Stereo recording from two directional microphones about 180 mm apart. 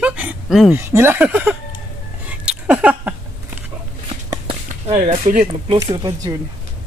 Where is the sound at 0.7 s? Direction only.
15° right (ahead or behind).